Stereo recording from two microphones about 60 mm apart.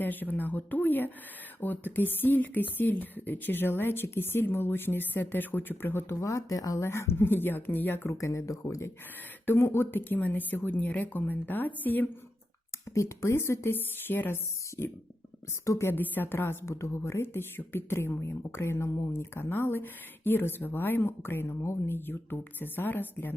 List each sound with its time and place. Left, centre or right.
0.0 s speech: left
8.2 s speech: left
9.5 s speech: left
12.9 s a woman's voice: left
14.1 s speech: left
15.6 s speech: left
15.9 s a woman's voice: left